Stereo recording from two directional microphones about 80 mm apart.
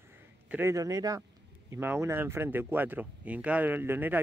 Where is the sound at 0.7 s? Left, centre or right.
Right.